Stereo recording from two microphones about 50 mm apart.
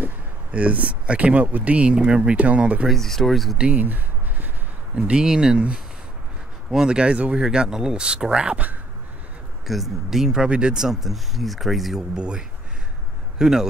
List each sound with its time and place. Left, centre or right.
0.0 s speech: right
2.9 s speech: centre
3.7 s a sound: right
4.9 s speech: centre
9.7 s speech: centre
12.2 s speech: centre